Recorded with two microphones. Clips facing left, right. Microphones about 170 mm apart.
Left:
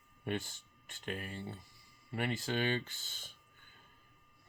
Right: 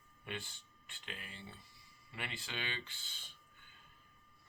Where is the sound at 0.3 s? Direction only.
45° left (ahead or behind).